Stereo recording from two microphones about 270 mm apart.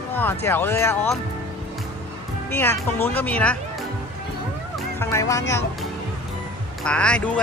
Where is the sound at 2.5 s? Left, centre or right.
Centre.